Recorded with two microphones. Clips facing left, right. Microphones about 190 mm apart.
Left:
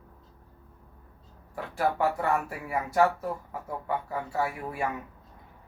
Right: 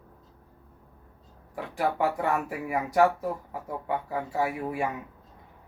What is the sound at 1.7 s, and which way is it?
Speech, 15° right (ahead or behind).